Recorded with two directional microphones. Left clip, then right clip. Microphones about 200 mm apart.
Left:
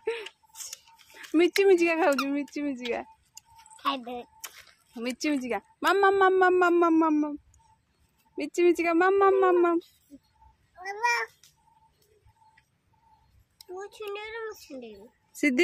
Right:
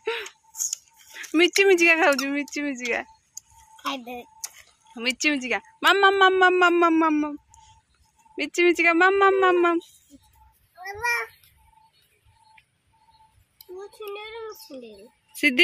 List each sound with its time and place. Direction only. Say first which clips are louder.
0.0 s scissors: right 3 dB; 5° left (ahead or behind)
1.1 s speech: right 4 dB; 5° left (ahead or behind)
3.7 s speech: left 1 dB; 15° left (ahead or behind)
4.9 s speech: right 6 dB; 5° left (ahead or behind)
8.4 s speech: right 4 dB; 5° left (ahead or behind)
13.6 s a child's voice: even; 20° left (ahead or behind)